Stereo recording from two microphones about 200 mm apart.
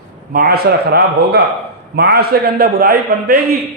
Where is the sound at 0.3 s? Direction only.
50° right (ahead or behind).